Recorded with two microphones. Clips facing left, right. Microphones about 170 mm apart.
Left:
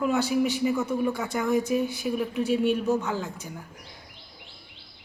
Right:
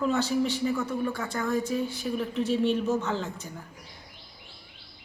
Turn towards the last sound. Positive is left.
turn(degrees=10)  # may be behind; listen again after turning